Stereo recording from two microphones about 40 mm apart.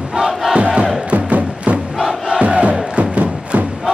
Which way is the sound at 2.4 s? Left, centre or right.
Right.